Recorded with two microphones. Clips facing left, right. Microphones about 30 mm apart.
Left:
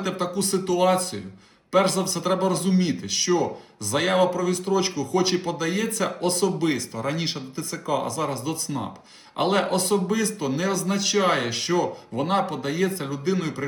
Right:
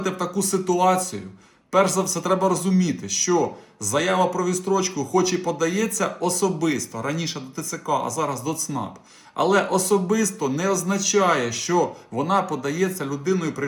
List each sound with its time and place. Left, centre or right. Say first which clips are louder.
0.2 s speech: right 1 dB; left
8.7 s speech: right 2 dB; centre
9.3 s speech: right 3 dB; left